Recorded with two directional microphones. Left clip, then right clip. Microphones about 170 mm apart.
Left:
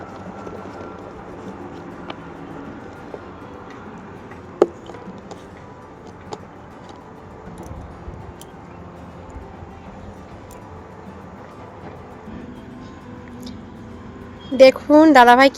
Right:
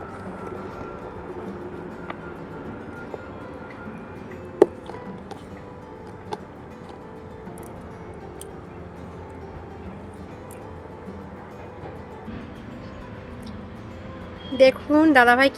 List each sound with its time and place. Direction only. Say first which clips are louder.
14.5 s speech: left 6 dB; 40° left (ahead or behind)